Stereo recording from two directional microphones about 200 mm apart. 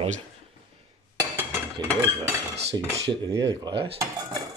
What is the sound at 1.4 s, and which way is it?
Cutlery, 15° right (ahead or behind).